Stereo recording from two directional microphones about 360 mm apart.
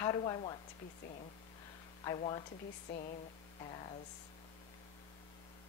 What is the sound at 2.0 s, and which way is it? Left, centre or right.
Speech, centre.